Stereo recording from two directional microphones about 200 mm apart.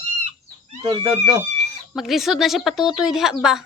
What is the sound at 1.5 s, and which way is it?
Speech, centre (ahead or behind).